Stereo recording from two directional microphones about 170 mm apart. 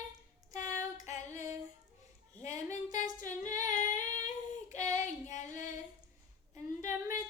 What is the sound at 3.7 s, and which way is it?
Female singing, 50° left (ahead or behind).